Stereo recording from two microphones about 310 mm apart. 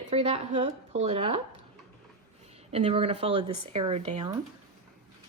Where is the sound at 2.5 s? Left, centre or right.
Centre.